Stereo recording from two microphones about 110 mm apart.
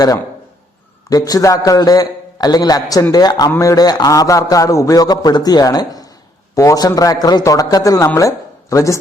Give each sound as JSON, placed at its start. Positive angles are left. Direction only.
{"t": 1.1, "sound": "a man's voice", "side_deg": 35}